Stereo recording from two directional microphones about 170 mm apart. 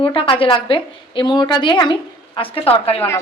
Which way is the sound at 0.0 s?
30° left (ahead or behind).